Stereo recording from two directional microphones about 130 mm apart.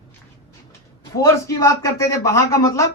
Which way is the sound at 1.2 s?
25° left (ahead or behind).